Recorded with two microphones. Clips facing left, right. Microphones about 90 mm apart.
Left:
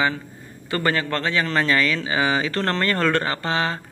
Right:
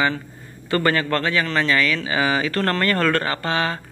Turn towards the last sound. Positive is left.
turn(degrees=25)  # may be behind; listen again after turning